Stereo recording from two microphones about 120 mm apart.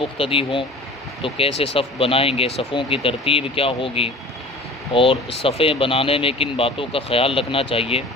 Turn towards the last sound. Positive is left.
turn(degrees=50)  # may be behind; listen again after turning